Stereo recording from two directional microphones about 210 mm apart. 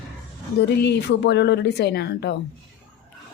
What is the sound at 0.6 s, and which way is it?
Speech, 55° left (ahead or behind).